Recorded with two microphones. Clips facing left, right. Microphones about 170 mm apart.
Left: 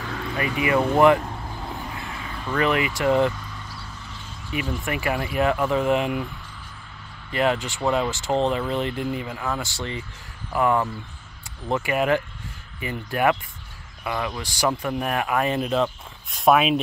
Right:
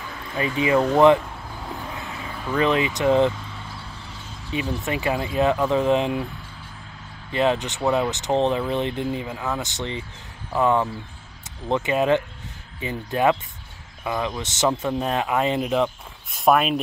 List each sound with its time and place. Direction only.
0.4 s speech: 25° right (ahead or behind)
2.5 s speech: 20° right (ahead or behind)
4.5 s speech: 20° right (ahead or behind)
7.2 s speech: 20° right (ahead or behind)
16.4 s speech: centre (ahead or behind)